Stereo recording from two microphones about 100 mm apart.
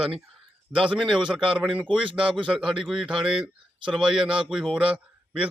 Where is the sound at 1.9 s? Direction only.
55° right (ahead or behind).